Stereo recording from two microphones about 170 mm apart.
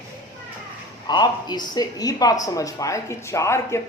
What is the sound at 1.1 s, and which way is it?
Speech, 25° left (ahead or behind).